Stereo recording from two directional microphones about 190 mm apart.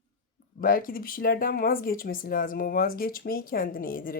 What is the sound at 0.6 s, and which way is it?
Speech, 50° left (ahead or behind).